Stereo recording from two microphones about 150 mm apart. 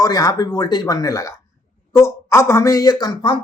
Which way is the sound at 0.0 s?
25° left (ahead or behind).